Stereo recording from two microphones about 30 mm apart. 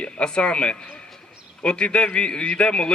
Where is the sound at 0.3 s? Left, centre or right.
Left.